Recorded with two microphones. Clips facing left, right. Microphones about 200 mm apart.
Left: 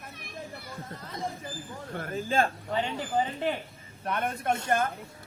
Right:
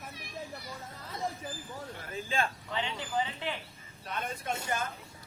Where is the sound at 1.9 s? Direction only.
50° left (ahead or behind).